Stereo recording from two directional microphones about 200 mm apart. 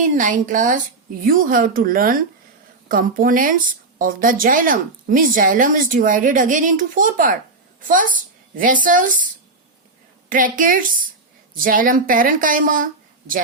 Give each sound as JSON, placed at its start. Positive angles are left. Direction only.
{"t": 0.2, "sound": "a woman's voice", "side_deg": -40}